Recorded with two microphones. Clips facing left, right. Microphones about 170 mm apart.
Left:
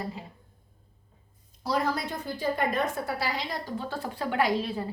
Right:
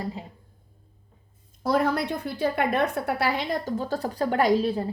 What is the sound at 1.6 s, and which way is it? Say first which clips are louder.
A woman's voice: right 5 dB; 55° right (ahead or behind).